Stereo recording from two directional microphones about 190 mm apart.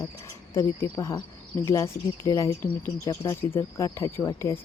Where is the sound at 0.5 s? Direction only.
15° left (ahead or behind).